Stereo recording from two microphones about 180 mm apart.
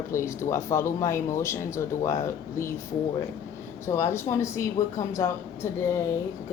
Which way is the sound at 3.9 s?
15° left (ahead or behind).